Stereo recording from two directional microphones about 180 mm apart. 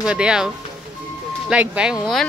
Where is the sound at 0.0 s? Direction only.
5° right (ahead or behind).